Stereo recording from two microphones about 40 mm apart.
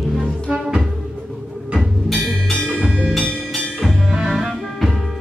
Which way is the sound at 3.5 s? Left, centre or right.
Centre.